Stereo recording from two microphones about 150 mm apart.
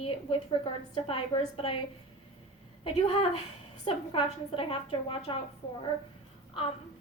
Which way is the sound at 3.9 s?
40° left (ahead or behind).